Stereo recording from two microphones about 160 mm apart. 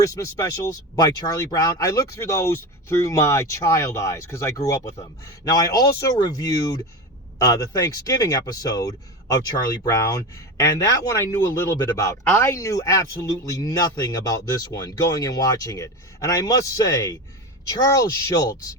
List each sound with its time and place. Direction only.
0.0 s speech: 20° left (ahead or behind)